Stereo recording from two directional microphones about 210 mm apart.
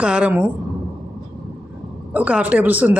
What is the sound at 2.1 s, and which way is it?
Speech, 5° right (ahead or behind).